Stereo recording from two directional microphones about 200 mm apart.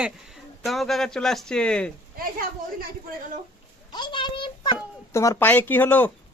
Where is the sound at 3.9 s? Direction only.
25° left (ahead or behind).